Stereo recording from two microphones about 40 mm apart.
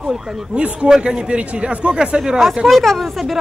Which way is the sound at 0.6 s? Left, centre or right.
Right.